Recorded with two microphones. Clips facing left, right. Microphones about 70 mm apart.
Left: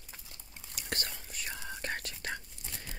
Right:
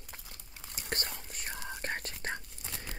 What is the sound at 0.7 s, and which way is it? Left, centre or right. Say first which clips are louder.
Whispering: right 1 dB; right.